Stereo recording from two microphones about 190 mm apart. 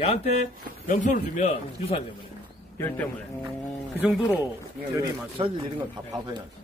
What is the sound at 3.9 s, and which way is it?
Speech, 10° right (ahead or behind).